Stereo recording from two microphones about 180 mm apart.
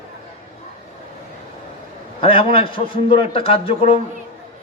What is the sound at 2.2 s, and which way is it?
A man's voice, 30° left (ahead or behind).